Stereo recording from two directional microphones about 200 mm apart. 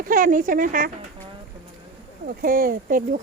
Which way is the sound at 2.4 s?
45° right (ahead or behind).